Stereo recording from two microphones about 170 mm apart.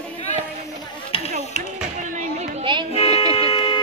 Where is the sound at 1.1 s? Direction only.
35° left (ahead or behind).